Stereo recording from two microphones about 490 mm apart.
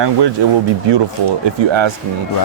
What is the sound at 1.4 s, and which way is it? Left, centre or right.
Speech, right.